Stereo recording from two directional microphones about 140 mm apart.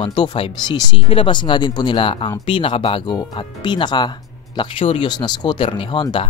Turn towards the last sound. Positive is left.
turn(degrees=35)  # may be behind; listen again after turning